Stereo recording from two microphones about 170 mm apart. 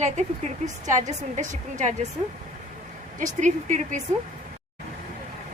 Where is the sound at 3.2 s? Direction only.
45° right (ahead or behind).